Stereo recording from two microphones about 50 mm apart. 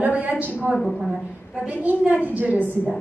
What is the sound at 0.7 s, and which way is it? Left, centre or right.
Speech, centre.